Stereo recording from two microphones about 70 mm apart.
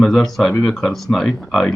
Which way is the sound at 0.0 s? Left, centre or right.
Centre.